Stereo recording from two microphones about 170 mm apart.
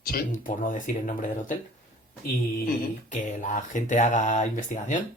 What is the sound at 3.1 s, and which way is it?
Speech, 45° left (ahead or behind).